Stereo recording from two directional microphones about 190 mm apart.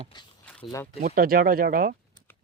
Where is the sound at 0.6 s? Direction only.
25° left (ahead or behind).